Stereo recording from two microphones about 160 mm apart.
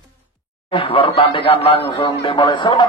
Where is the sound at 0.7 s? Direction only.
35° left (ahead or behind).